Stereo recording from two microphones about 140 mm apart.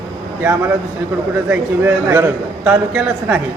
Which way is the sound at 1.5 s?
15° right (ahead or behind).